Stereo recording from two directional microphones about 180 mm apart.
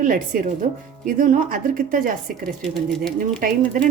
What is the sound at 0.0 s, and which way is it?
Speech, 50° right (ahead or behind).